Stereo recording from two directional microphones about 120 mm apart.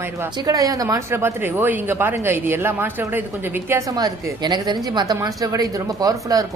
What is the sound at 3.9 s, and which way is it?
A woman's voice, 35° right (ahead or behind).